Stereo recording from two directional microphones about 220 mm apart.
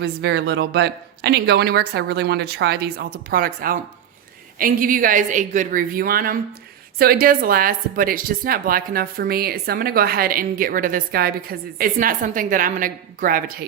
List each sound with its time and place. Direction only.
0.0 s speech: 50° right (ahead or behind)